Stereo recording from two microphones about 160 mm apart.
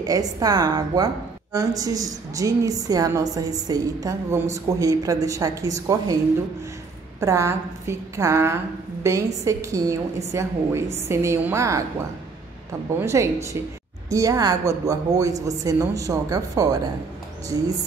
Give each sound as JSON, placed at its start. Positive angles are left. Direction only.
{"t": 0.0, "sound": "a woman's voice", "side_deg": -25}
{"t": 7.2, "sound": "a woman's voice", "side_deg": -20}
{"t": 13.0, "sound": "a woman's voice", "side_deg": -20}